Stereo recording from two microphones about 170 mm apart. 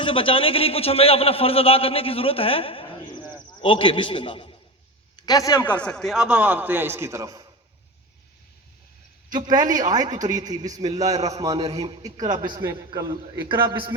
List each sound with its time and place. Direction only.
0.0 s a man's voice: 30° left (ahead or behind)
5.7 s a man's voice: 5° left (ahead or behind); by 7.4 s 20° right (ahead or behind)
9.3 s a man's voice: 25° right (ahead or behind)
11.5 s a man's voice: 35° right (ahead or behind)
12.2 s a man's voice: 25° right (ahead or behind)